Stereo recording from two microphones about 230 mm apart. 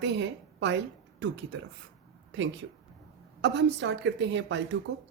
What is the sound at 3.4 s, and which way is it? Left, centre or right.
A woman's voice, right.